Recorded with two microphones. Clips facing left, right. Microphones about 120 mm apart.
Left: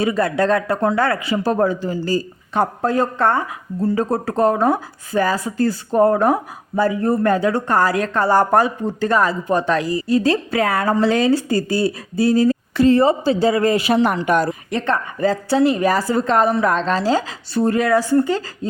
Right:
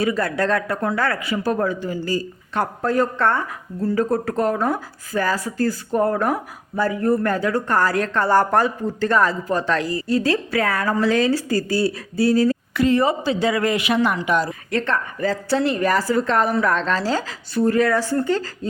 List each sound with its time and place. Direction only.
0.0 s speech: 20° left (ahead or behind)
12.7 s speech: 30° left (ahead or behind); by 14.5 s 50° left (ahead or behind)
14.7 s a woman's voice: 20° left (ahead or behind)
17.5 s speech: 30° left (ahead or behind)
17.7 s a woman's voice: 15° left (ahead or behind)